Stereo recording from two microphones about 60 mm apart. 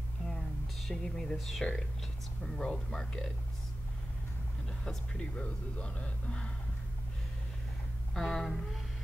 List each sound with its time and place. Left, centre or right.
0.3 s a sound: centre
1.6 s speech: centre
4.8 s speech: centre
8.1 s speech: centre